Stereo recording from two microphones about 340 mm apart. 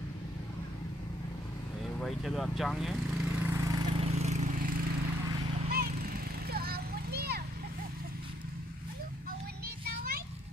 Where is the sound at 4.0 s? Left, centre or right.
Centre.